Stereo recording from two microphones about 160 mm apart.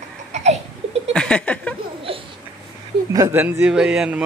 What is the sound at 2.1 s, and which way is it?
Babbling, 35° right (ahead or behind).